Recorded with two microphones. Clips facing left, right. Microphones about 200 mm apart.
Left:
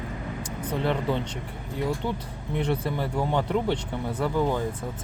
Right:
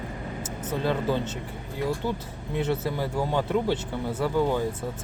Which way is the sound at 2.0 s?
5° right (ahead or behind).